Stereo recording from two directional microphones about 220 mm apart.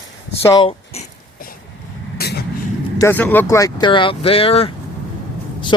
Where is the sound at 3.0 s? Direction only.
10° left (ahead or behind).